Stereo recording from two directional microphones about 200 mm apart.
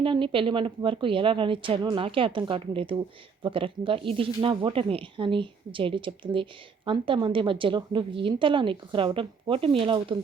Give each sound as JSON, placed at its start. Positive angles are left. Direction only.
{"t": 0.0, "sound": "speech", "side_deg": -25}